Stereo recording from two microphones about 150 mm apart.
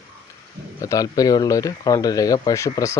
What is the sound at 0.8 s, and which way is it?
Speech, 25° left (ahead or behind).